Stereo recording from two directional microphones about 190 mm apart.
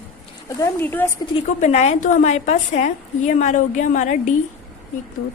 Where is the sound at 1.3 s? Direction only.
35° left (ahead or behind).